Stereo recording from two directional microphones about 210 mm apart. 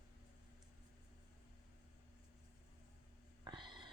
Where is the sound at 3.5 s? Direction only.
20° right (ahead or behind).